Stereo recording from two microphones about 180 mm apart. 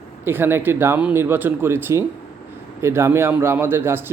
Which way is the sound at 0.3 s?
10° right (ahead or behind).